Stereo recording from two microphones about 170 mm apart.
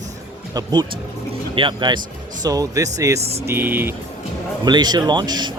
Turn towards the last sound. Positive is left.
turn(degrees=-25)  # may be behind; listen again after turning